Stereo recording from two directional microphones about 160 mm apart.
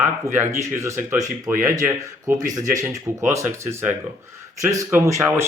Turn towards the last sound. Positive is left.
turn(degrees=-15)  # may be behind; listen again after turning